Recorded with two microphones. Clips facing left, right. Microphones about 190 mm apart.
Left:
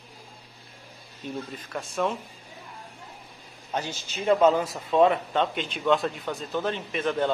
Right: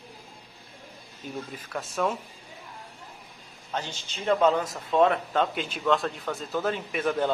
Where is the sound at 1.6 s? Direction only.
5° right (ahead or behind).